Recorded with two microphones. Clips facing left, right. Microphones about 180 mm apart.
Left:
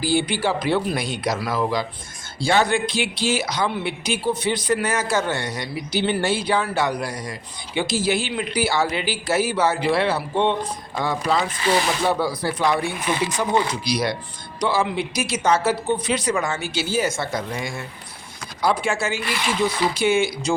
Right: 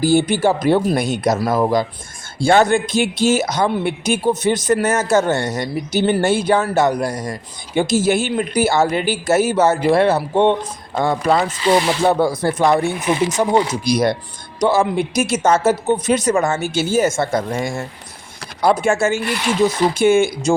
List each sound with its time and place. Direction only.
0.0 s speech: 45° right (ahead or behind)